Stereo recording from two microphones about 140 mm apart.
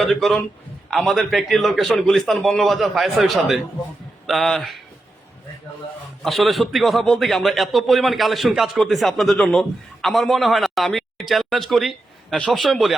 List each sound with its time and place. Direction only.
0.0 s a man's voice: centre (ahead or behind)
6.2 s a man's voice: centre (ahead or behind)